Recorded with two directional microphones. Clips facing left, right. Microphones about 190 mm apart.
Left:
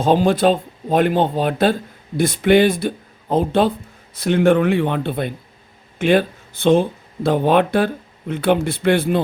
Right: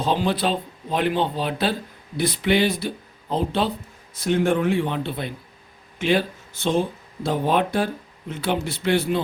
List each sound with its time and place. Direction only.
0.0 s speech: 50° left (ahead or behind)
4.1 s speech: 65° left (ahead or behind)